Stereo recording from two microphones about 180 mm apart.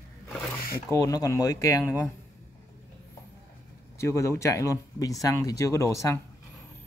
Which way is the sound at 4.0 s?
15° left (ahead or behind).